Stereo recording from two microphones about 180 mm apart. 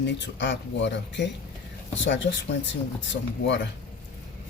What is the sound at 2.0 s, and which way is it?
Speech, 90° left.